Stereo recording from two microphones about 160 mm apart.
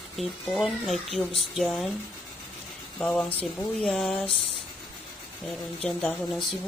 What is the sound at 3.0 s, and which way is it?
Speech, 10° left (ahead or behind).